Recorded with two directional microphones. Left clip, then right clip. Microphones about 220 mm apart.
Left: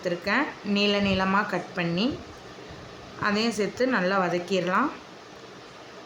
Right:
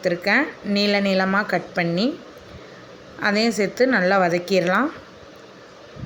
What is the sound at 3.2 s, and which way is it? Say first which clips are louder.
A woman's voice: right 5 dB; 20° right (ahead or behind).